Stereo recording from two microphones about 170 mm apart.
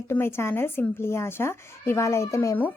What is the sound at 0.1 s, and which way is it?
A woman's voice, 15° left (ahead or behind).